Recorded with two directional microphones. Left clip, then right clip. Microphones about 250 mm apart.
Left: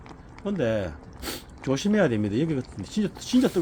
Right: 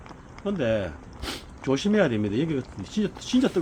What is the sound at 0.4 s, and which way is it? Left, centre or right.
Speech, left.